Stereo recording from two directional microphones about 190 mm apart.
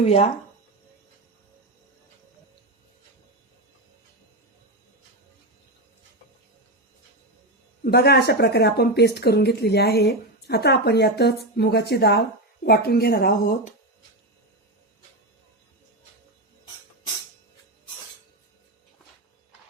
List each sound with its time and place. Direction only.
0.0 s speech: 35° left (ahead or behind)
7.9 s speech: 55° left (ahead or behind)